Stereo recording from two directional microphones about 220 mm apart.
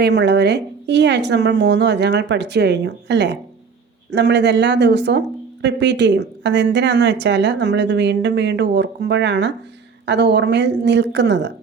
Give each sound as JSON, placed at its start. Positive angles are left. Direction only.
{"t": 0.0, "sound": "a woman's voice", "side_deg": -50}